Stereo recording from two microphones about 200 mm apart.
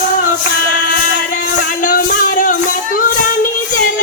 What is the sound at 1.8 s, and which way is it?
Music, 40° left (ahead or behind).